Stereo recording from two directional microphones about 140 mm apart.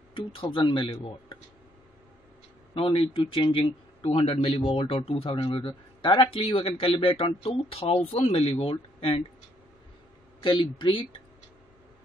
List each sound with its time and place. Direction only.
0.1 s speech: 40° left (ahead or behind)
2.7 s speech: 40° left (ahead or behind)
10.4 s speech: 35° left (ahead or behind)